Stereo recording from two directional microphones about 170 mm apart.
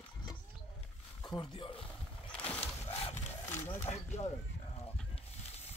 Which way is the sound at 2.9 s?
45° left (ahead or behind).